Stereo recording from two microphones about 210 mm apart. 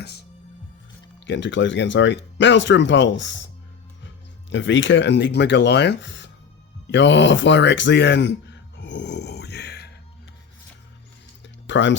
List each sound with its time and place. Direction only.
1.2 s speech: 60° left (ahead or behind)
6.9 s a sound: 60° left (ahead or behind)
11.4 s music: 60° left (ahead or behind)